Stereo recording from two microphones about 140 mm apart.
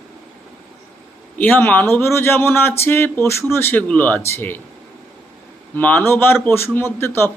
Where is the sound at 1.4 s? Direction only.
15° left (ahead or behind).